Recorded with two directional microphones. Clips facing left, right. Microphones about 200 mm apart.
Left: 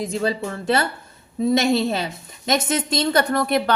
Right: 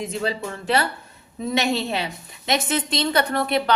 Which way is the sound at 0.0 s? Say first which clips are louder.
Left 3 dB; 35° left (ahead or behind).